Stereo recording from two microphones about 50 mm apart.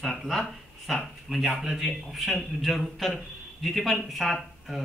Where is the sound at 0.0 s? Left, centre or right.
Centre.